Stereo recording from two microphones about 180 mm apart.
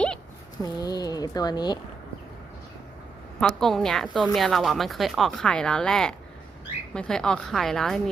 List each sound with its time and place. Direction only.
0.6 s speech: 20° left (ahead or behind)
3.4 s speech: centre (ahead or behind)